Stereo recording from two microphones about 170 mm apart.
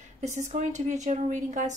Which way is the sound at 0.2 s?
45° right (ahead or behind).